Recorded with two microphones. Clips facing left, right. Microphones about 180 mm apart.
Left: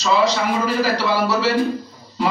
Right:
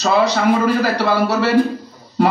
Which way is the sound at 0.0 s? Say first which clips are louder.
Right 3 dB; 60° right (ahead or behind).